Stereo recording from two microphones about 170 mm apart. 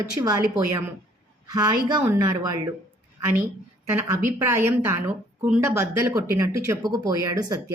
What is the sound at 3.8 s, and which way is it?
A woman's voice, 15° right (ahead or behind).